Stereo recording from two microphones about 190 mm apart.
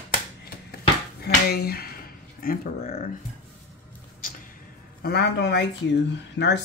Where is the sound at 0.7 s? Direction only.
55° left (ahead or behind).